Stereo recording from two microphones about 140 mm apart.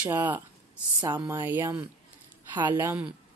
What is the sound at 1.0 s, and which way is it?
Speech, 30° right (ahead or behind).